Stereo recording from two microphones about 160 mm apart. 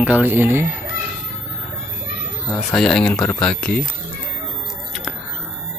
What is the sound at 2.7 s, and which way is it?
Speech, 5° left (ahead or behind).